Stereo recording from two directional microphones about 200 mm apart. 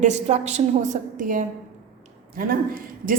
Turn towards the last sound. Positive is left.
turn(degrees=-45)  # may be behind; listen again after turning